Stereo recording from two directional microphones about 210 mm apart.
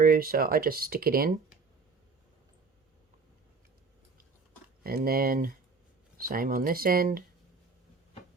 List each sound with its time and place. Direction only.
0.0 s speech: 45° right (ahead or behind)
4.8 s speech: 45° right (ahead or behind)